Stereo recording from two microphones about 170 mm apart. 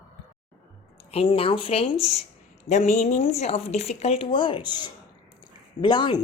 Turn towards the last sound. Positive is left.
turn(degrees=25)  # may be behind; listen again after turning